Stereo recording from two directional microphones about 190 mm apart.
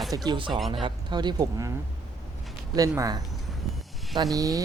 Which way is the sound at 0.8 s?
25° right (ahead or behind).